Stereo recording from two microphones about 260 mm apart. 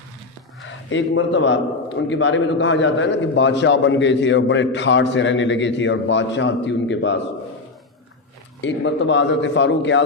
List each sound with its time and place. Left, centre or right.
0.7 s a man's voice: left
8.6 s a man's voice: left